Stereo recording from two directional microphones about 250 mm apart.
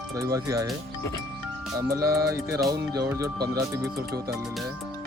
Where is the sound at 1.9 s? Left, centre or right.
Centre.